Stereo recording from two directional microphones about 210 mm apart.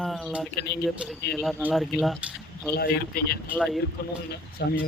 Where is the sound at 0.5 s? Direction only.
50° left (ahead or behind).